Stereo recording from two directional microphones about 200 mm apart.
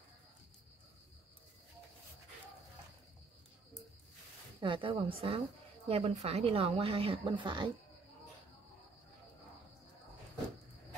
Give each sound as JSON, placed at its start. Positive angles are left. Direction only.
{"t": 4.6, "sound": "speech", "side_deg": -25}